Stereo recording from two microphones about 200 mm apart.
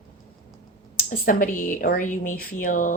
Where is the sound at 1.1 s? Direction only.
40° left (ahead or behind).